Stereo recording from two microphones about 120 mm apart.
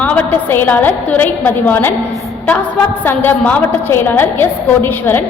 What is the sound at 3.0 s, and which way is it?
A woman's voice, 15° left (ahead or behind).